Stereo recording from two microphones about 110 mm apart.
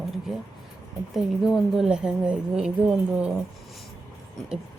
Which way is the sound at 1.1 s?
Centre (ahead or behind).